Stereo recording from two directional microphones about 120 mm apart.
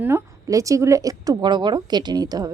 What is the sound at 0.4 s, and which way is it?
A woman's voice, 25° right (ahead or behind).